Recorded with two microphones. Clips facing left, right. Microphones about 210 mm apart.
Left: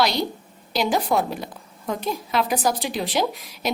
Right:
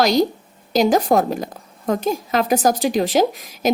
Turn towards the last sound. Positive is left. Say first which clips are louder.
# right 6 dB
turn(degrees=-45)  # may be behind; listen again after turning